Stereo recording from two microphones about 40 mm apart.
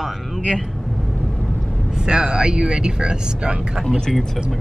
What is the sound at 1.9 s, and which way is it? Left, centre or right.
Speech, centre.